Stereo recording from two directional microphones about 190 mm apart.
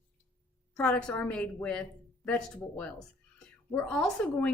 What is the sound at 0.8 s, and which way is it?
A woman's voice, 5° left (ahead or behind).